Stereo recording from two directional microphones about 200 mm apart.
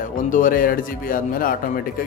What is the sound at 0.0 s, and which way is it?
A man's voice, 40° left (ahead or behind).